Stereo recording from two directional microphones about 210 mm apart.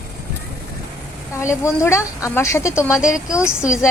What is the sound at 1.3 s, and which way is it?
A woman's voice, 15° left (ahead or behind).